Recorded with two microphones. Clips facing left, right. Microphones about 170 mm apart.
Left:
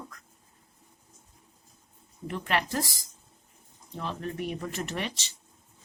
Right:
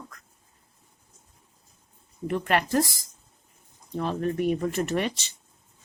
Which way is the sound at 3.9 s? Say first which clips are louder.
Right 7 dB; 50° right (ahead or behind).